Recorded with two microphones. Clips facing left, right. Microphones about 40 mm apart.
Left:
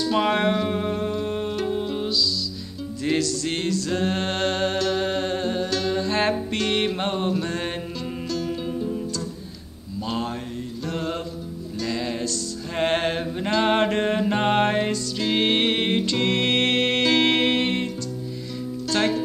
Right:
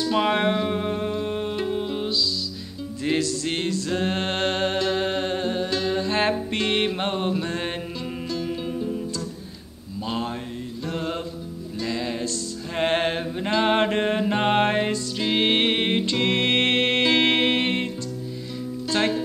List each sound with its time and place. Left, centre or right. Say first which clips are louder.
0.0 s music: even; centre
2.0 s music: left 1 dB; right
3.1 s music: even; centre
3.6 s music: left 2 dB; right; by 9.0 s centre
10.0 s mantra: even; centre
11.8 s music: even; centre
18.9 s music: left 1 dB; centre